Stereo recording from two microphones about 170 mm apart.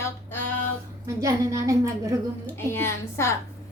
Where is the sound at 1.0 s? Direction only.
20° right (ahead or behind).